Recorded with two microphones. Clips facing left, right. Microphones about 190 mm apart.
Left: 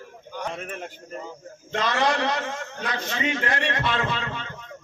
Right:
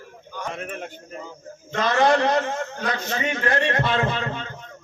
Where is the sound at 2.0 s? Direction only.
50° right (ahead or behind).